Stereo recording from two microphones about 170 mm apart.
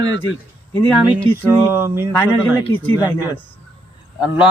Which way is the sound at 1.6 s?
15° right (ahead or behind).